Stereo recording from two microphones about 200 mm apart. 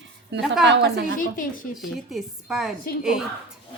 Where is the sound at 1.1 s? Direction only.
45° left (ahead or behind).